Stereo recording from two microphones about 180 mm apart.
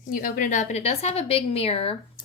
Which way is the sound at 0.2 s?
50° left (ahead or behind).